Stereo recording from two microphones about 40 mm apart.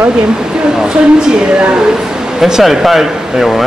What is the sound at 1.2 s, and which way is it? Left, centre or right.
A woman's voice, centre.